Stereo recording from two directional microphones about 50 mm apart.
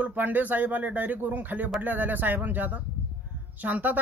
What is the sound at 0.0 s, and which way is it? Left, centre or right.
Speech, right.